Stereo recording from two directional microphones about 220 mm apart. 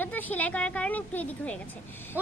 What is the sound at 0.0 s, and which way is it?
A child's voice, 10° left (ahead or behind).